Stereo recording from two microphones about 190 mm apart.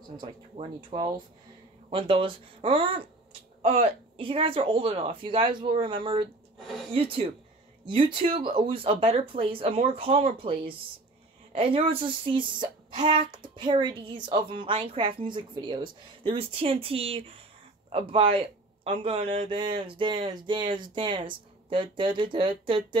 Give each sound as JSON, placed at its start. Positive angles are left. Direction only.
{"t": 0.2, "sound": "speech", "side_deg": -25}
{"t": 6.6, "sound": "a sound", "side_deg": 0}
{"t": 6.9, "sound": "speech", "side_deg": -30}